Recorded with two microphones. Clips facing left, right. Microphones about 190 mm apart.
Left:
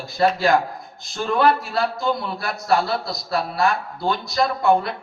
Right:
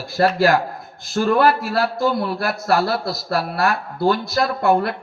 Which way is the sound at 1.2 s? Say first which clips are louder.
Right 2 dB; 5° right (ahead or behind).